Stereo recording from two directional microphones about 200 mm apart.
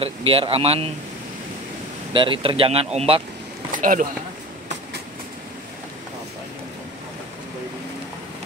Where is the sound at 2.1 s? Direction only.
25° right (ahead or behind).